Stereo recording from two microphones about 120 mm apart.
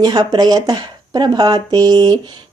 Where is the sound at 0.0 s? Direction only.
35° right (ahead or behind).